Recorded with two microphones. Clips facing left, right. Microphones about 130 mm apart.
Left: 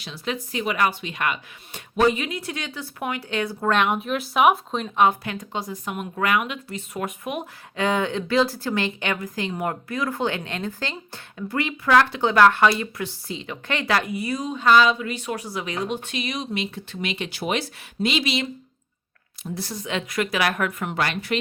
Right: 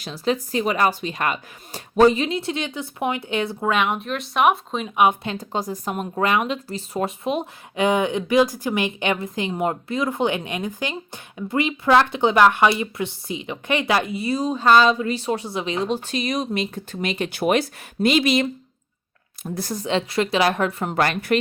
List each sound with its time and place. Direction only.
0.0 s speech: 40° right (ahead or behind); by 3.7 s 20° right (ahead or behind)
3.7 s speech: centre (ahead or behind)
5.2 s speech: 25° right (ahead or behind)
5.5 s speech: 40° right (ahead or behind)
20.9 s speech: 45° right (ahead or behind)